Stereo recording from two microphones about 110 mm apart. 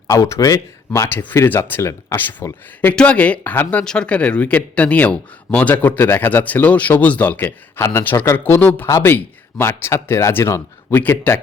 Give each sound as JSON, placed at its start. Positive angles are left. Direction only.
{"t": 0.1, "sound": "speech", "side_deg": 30}
{"t": 2.9, "sound": "speech", "side_deg": 10}
{"t": 8.9, "sound": "speech", "side_deg": 30}